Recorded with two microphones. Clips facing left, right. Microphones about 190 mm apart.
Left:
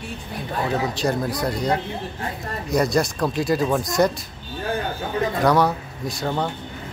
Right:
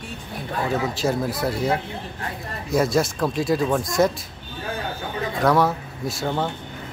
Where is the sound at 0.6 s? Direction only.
Centre (ahead or behind).